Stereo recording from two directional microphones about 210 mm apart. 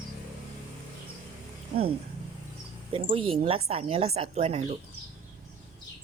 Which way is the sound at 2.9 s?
25° right (ahead or behind).